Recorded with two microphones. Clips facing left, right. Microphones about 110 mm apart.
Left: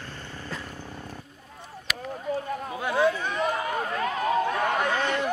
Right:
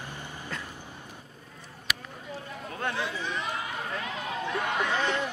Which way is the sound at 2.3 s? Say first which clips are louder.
Left 9 dB; 50° left (ahead or behind).